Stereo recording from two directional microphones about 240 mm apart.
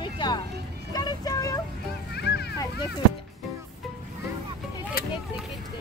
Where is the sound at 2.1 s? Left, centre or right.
Left.